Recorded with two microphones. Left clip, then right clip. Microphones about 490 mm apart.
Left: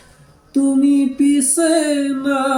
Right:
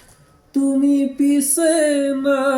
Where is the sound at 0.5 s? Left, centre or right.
Right.